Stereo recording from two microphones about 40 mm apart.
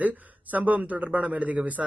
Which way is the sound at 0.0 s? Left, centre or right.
Right.